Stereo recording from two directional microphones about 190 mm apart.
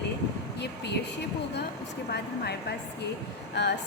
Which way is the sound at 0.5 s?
65° left (ahead or behind).